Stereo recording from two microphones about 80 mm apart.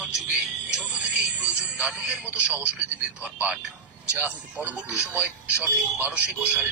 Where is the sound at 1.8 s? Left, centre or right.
Centre.